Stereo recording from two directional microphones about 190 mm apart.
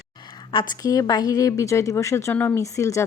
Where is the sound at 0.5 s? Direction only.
20° left (ahead or behind).